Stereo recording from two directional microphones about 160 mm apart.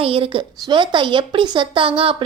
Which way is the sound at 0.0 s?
35° right (ahead or behind).